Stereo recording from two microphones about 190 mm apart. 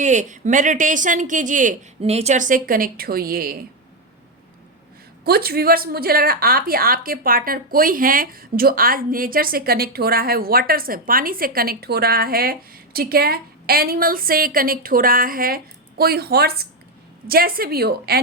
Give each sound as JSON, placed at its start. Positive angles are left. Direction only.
{"t": 0.0, "sound": "a woman's voice", "side_deg": -40}
{"t": 5.2, "sound": "a woman's voice", "side_deg": -55}